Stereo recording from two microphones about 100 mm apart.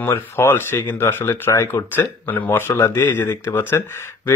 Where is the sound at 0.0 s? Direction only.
25° left (ahead or behind).